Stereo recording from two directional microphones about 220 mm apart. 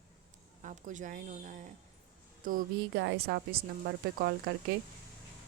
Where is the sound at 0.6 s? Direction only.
35° right (ahead or behind).